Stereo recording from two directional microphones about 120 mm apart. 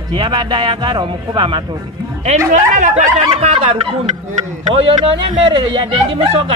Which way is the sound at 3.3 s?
50° right (ahead or behind).